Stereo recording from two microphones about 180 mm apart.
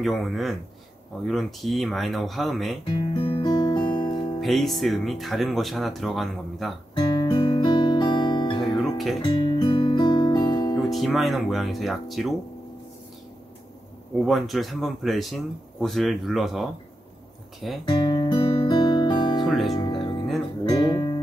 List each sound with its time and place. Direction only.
0.0 s speech: centre (ahead or behind)
2.8 s guitar: 25° left (ahead or behind)
4.4 s speech: centre (ahead or behind)
7.0 s guitar: 25° left (ahead or behind)
8.6 s music: centre (ahead or behind)
9.2 s guitar: 25° left (ahead or behind)
10.5 s music: 20° left (ahead or behind)
10.8 s speech: centre (ahead or behind)
14.2 s speech: centre (ahead or behind)
17.8 s guitar: 25° left (ahead or behind)
19.4 s music: centre (ahead or behind)
19.9 s music: 25° left (ahead or behind)